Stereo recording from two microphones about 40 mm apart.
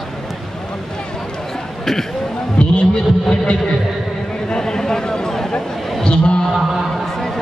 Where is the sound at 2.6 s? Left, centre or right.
Left.